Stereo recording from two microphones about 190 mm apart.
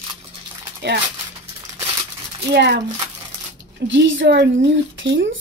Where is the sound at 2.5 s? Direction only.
65° right (ahead or behind).